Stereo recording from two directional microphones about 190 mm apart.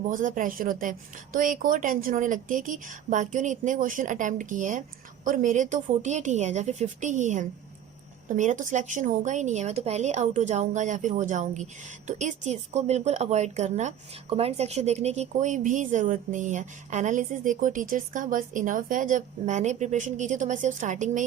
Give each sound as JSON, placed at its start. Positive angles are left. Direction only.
{"t": 0.1, "sound": "a woman's voice", "side_deg": -45}